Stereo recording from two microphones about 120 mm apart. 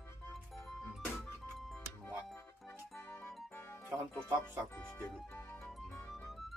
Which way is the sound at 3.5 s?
15° left (ahead or behind).